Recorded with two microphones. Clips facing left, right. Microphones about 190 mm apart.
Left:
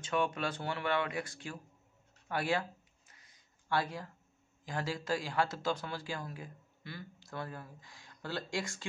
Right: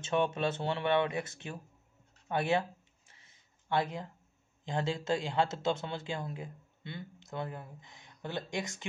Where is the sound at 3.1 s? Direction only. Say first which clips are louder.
Right 1 dB; 25° right (ahead or behind).